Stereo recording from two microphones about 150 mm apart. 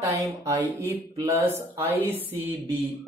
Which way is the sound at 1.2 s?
15° right (ahead or behind).